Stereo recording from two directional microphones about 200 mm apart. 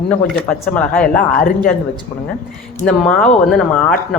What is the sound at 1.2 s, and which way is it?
Speech, 45° left (ahead or behind).